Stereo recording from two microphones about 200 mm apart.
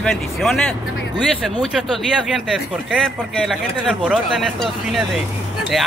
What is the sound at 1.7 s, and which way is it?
A man's voice, centre (ahead or behind).